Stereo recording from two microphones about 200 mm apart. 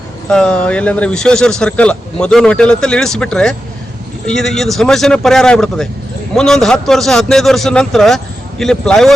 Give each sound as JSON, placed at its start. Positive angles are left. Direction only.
{"t": 0.3, "sound": "speech", "side_deg": 5}